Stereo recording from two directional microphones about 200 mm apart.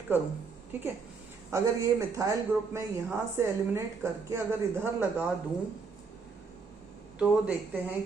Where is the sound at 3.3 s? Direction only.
15° right (ahead or behind).